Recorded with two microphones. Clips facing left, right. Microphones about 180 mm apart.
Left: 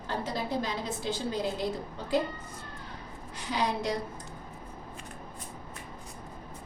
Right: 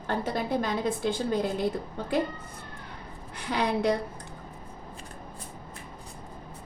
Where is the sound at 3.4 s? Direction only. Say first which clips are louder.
Right 3 dB; 60° right (ahead or behind).